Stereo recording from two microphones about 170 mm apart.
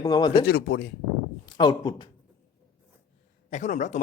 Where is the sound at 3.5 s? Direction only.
45° left (ahead or behind).